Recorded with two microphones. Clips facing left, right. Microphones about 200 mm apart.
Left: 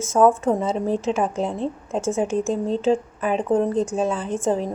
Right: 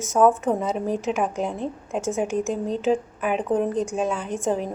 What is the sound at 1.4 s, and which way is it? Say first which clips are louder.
A woman's voice: left 2 dB; 30° left (ahead or behind).